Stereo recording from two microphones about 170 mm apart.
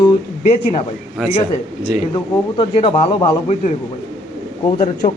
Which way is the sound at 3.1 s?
25° left (ahead or behind).